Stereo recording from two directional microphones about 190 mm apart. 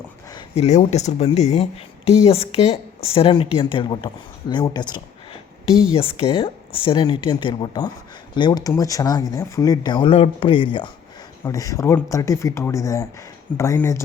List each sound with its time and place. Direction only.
0.5 s speech: 35° left (ahead or behind); by 14.0 s 15° left (ahead or behind)